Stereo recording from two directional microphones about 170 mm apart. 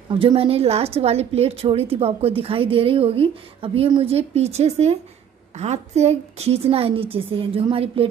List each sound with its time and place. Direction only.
0.1 s a woman's voice: 30° right (ahead or behind)